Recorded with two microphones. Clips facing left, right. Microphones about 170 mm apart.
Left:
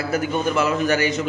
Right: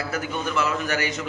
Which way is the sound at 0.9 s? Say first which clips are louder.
Left 6 dB; 25° left (ahead or behind).